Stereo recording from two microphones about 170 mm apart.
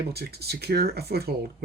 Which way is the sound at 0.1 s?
70° right (ahead or behind).